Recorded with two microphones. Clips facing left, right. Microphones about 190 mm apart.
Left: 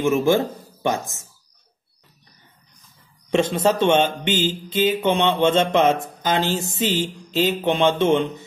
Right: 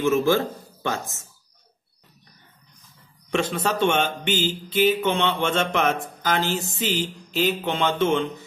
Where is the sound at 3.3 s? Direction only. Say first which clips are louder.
Left 5 dB; 20° left (ahead or behind).